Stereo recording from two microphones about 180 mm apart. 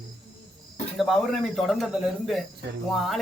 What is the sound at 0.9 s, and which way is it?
Speech, centre (ahead or behind).